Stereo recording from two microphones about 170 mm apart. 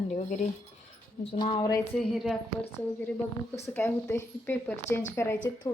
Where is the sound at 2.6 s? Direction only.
10° left (ahead or behind).